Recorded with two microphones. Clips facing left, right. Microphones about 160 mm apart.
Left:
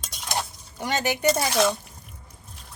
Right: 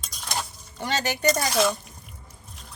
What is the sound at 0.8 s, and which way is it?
Speech, 15° left (ahead or behind).